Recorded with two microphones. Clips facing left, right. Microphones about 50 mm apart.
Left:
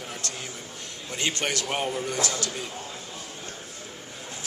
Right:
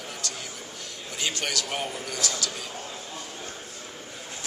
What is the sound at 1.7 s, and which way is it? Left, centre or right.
Speech, centre.